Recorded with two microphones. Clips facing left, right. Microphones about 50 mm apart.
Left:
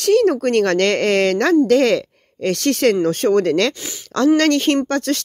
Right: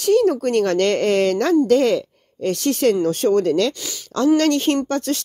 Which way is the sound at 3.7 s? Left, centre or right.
Left.